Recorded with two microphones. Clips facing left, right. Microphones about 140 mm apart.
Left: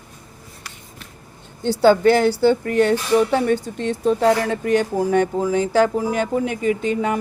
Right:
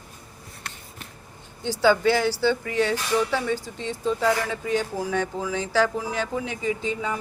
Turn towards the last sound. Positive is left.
turn(degrees=65)  # may be behind; listen again after turning